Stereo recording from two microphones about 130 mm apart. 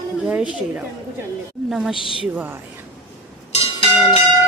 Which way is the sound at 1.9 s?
40° left (ahead or behind).